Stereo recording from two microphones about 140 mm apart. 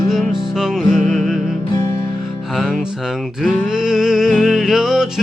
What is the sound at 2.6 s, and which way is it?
Music, centre (ahead or behind).